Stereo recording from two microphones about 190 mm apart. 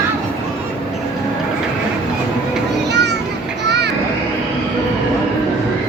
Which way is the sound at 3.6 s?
60° right (ahead or behind).